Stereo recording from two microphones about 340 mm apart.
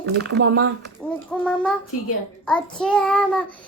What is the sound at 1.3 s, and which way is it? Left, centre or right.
Child singing, centre.